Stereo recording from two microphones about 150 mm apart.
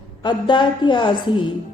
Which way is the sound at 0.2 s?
30° left (ahead or behind).